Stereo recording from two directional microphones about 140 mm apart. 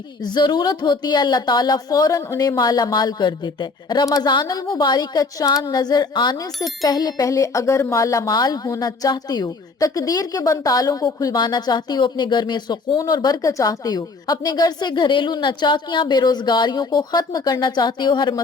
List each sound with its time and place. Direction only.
0.3 s speech: 30° left (ahead or behind)